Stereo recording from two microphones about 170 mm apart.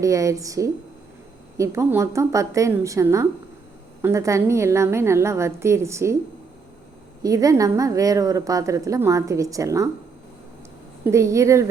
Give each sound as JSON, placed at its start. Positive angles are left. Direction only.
{"t": 0.0, "sound": "a woman's voice", "side_deg": -20}
{"t": 7.2, "sound": "a woman's voice", "side_deg": -20}
{"t": 11.0, "sound": "a woman's voice", "side_deg": -15}